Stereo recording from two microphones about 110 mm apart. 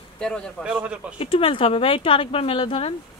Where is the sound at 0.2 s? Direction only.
5° left (ahead or behind).